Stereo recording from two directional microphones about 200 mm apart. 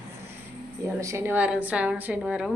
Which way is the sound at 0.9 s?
15° right (ahead or behind).